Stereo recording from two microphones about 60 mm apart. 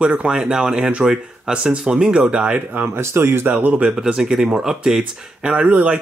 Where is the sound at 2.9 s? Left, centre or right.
Right.